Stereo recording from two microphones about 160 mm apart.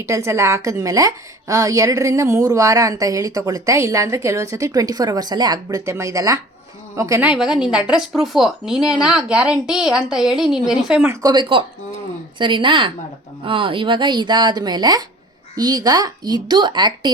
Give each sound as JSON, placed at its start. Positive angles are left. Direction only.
{"t": 0.0, "sound": "a woman's voice", "side_deg": -20}
{"t": 11.1, "sound": "a woman's voice", "side_deg": -25}